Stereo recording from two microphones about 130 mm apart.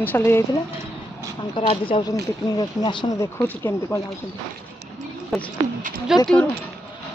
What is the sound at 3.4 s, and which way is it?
Speech, 15° left (ahead or behind).